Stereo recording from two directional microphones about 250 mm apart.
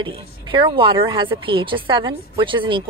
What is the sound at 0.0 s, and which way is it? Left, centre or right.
A woman's voice, centre.